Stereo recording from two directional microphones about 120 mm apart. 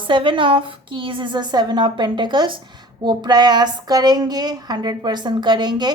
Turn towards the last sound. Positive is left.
turn(degrees=-40)  # may be behind; listen again after turning